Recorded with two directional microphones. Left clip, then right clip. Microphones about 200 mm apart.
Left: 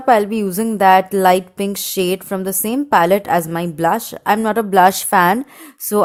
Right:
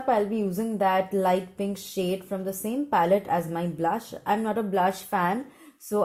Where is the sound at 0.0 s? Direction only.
40° left (ahead or behind).